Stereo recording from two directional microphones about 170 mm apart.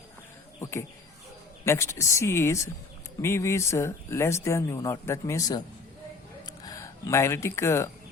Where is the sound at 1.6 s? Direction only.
15° left (ahead or behind).